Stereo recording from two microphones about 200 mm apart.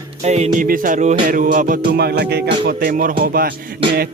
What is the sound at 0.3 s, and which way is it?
Music, 35° right (ahead or behind).